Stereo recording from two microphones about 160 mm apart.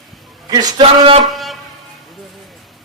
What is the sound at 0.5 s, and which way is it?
Speech, 30° right (ahead or behind).